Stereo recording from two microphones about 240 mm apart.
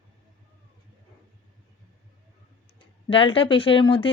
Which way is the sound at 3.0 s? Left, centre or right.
Left.